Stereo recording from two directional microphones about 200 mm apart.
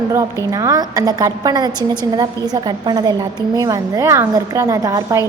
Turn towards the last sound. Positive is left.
turn(degrees=-15)  # may be behind; listen again after turning